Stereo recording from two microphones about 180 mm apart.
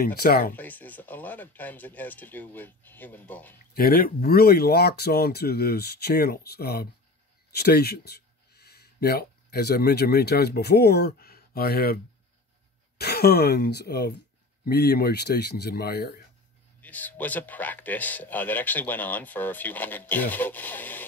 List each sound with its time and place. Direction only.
0.0 s speech: 55° left (ahead or behind)
0.6 s speech: 10° left (ahead or behind)
3.7 s speech: 55° left (ahead or behind)
16.8 s speech: 10° left (ahead or behind)